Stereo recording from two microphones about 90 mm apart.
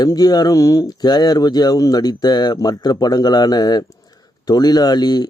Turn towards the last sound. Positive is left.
turn(degrees=50)  # may be behind; listen again after turning